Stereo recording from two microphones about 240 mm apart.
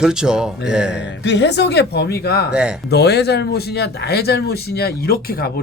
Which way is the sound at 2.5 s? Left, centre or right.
Centre.